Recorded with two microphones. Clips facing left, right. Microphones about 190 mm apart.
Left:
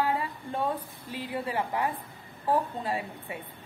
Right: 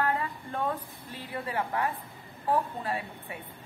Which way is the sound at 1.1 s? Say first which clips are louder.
Left 2 dB; 10° left (ahead or behind).